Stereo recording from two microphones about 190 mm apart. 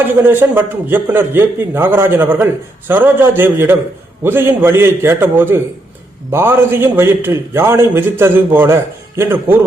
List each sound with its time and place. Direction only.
0.3 s a man's voice: 10° right (ahead or behind)